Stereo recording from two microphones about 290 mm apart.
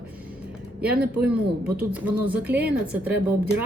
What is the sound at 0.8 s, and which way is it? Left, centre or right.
Speech, right.